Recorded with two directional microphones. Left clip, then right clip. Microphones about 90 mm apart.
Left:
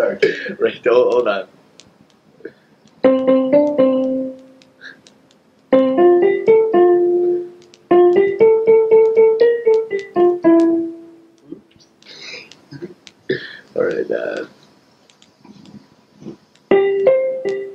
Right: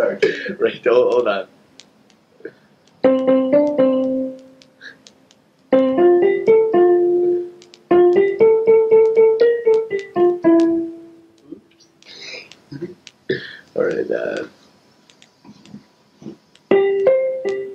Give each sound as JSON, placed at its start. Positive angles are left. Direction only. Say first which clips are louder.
{"t": 0.0, "sound": "speech", "louder": "left 1 dB", "side_deg": -35}
{"t": 2.4, "sound": "music", "louder": "even", "side_deg": -35}
{"t": 5.7, "sound": "keyboard", "louder": "left 2 dB", "side_deg": -35}
{"t": 7.5, "sound": "music", "louder": "left 3 dB", "side_deg": -35}
{"t": 11.5, "sound": "a sound", "louder": "left 2 dB", "side_deg": -30}
{"t": 15.4, "sound": "keyboard", "louder": "left 1 dB", "side_deg": -35}